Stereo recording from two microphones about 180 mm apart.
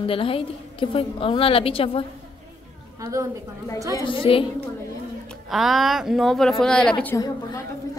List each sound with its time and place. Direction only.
0.0 s a woman's voice: 30° left (ahead or behind)
3.0 s a woman's voice: 20° right (ahead or behind)
3.9 s a woman's voice: 30° left (ahead or behind)
5.5 s speech: centre (ahead or behind)
7.2 s a woman's voice: 20° left (ahead or behind)